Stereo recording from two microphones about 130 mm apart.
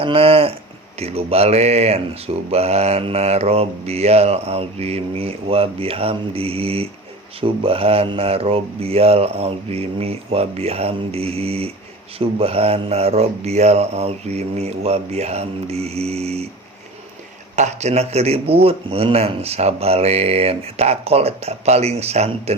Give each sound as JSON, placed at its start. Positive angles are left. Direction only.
{"t": 0.0, "sound": "speech", "side_deg": -45}
{"t": 17.6, "sound": "speech", "side_deg": -60}